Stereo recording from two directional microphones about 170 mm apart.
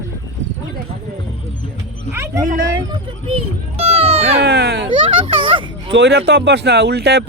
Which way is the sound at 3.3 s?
35° right (ahead or behind).